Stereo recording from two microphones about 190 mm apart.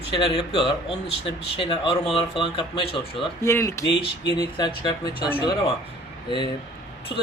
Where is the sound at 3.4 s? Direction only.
15° left (ahead or behind).